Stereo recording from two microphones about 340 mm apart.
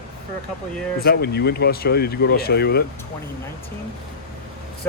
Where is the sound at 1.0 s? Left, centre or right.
Left.